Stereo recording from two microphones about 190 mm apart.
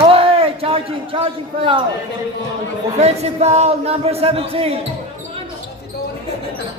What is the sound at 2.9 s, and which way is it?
Speech, 35° right (ahead or behind).